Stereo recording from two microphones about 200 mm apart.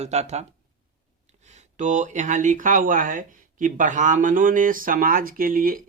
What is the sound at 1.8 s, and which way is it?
Speech, 40° right (ahead or behind).